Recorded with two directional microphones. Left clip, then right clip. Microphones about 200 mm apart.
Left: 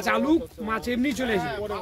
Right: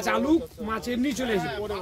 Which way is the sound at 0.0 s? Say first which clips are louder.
Left 1 dB; 15° left (ahead or behind).